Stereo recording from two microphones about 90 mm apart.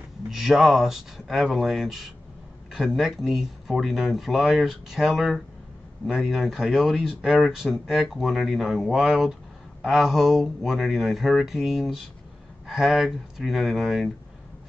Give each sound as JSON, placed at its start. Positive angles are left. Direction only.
{"t": 0.3, "sound": "speech", "side_deg": -5}